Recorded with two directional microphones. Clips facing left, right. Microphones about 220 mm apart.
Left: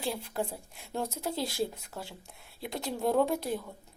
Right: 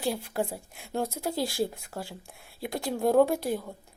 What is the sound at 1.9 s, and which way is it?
Speech, 35° right (ahead or behind).